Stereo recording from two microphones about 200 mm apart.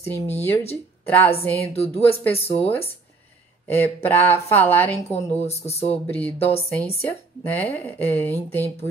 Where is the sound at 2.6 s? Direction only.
10° left (ahead or behind).